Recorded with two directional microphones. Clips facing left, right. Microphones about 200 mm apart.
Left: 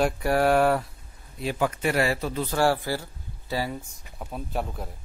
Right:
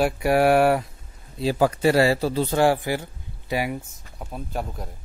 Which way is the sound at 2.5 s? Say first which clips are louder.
Right 2 dB; 15° right (ahead or behind).